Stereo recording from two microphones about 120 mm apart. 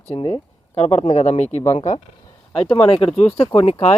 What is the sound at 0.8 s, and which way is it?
Speech, 60° left (ahead or behind).